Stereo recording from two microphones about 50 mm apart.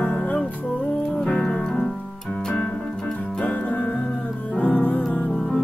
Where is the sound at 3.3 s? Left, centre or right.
Left.